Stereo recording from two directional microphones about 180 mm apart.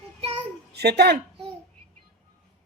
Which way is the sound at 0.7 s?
65° right (ahead or behind).